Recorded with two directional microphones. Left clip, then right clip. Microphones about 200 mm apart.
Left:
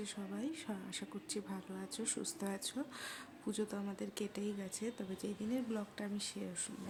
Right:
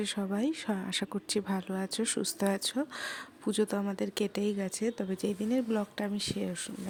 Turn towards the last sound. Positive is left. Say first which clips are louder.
# right 10 dB
turn(degrees=-40)  # may be behind; listen again after turning